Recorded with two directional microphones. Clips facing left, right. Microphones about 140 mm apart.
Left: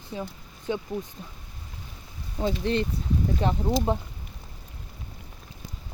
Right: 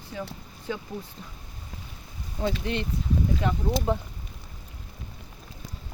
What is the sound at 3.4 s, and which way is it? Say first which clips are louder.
Speech: left 4 dB; 30° left (ahead or behind).